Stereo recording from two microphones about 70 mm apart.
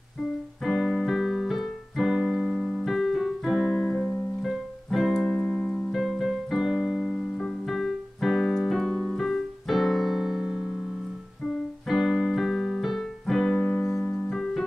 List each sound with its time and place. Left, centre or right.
0.7 s keyboard: centre
3.6 s keyboard: centre
4.4 s music: centre
5.1 s music: centre
5.9 s keyboard: centre
11.9 s keyboard: centre